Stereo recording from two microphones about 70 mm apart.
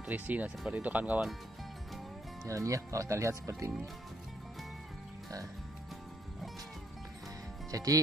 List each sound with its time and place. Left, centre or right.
0.0 s speech: right
2.4 s speech: right
7.7 s speech: right